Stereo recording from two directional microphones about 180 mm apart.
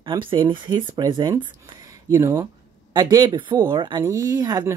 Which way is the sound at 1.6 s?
20° right (ahead or behind).